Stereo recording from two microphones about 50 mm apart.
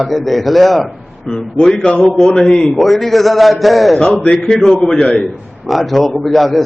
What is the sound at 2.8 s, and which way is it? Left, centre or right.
A man's voice, centre.